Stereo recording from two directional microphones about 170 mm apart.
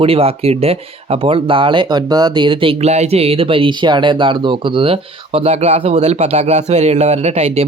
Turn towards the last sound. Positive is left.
turn(degrees=-40)  # may be behind; listen again after turning